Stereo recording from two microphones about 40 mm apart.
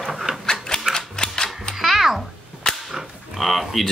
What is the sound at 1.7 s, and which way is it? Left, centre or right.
Music, centre.